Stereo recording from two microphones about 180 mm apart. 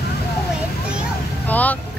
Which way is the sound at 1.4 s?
10° left (ahead or behind).